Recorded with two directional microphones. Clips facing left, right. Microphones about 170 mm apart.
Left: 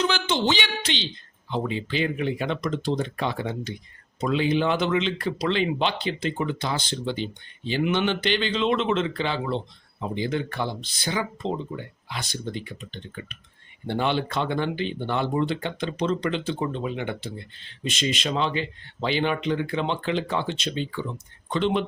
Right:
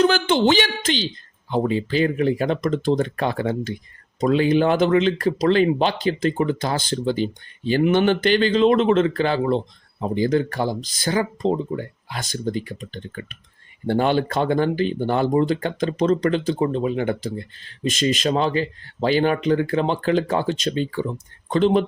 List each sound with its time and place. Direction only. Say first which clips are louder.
0.0 s speech: right 7 dB; 55° right (ahead or behind)